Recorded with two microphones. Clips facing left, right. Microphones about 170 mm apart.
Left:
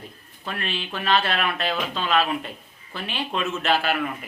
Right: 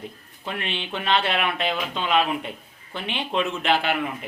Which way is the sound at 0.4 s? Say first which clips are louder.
Even; 20° right (ahead or behind).